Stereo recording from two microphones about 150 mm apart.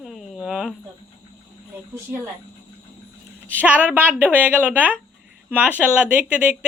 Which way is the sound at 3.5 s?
10° right (ahead or behind).